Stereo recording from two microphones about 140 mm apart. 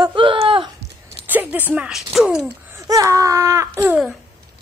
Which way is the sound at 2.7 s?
20° right (ahead or behind).